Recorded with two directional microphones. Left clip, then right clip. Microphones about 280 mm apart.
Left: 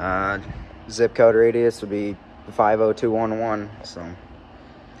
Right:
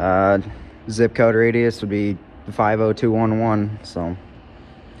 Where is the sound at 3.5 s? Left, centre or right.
Centre.